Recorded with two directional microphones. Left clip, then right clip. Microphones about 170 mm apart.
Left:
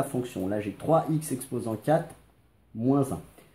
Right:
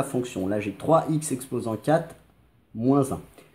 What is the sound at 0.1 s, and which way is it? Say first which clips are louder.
Speech: right 3 dB; 20° right (ahead or behind).